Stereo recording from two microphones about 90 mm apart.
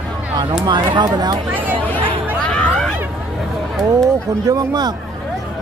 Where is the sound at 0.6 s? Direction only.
50° right (ahead or behind).